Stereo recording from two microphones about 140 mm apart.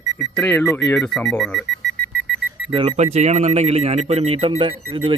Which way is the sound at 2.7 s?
40° right (ahead or behind).